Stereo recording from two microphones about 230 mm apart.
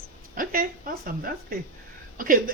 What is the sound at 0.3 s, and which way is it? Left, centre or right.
Speech, right.